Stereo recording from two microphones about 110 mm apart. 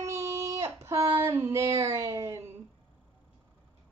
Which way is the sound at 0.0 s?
30° right (ahead or behind).